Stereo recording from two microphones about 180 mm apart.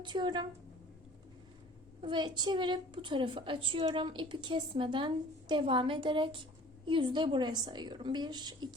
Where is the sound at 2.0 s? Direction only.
25° right (ahead or behind).